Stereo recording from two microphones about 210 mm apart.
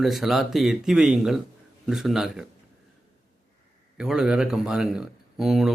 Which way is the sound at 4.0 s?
5° right (ahead or behind).